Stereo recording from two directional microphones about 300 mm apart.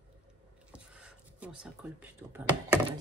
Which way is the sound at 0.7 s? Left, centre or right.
Centre.